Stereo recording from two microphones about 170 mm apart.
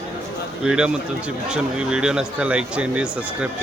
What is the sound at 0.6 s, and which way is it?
Speech, 5° right (ahead or behind).